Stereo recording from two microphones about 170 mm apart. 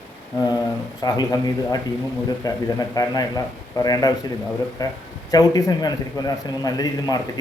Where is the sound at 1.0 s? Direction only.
25° left (ahead or behind).